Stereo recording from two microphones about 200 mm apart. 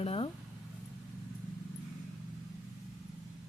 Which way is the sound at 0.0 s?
30° left (ahead or behind).